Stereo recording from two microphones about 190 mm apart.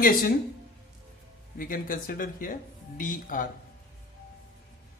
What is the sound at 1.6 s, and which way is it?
Speech, 45° left (ahead or behind).